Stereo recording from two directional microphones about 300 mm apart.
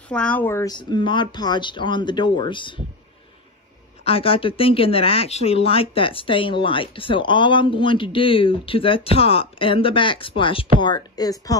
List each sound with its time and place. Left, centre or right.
0.1 s speech: centre
4.0 s speech: centre